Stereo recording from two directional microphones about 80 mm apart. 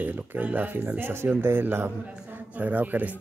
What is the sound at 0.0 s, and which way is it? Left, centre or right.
Speech, right.